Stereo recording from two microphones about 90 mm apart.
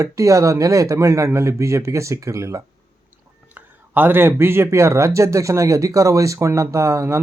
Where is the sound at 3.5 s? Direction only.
20° right (ahead or behind).